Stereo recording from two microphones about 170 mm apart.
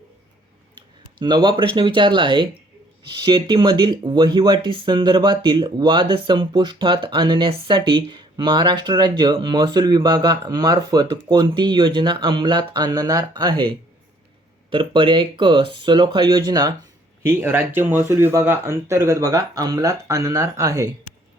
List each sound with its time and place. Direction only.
0.8 s speech: 25° right (ahead or behind)
14.7 s speech: 30° right (ahead or behind)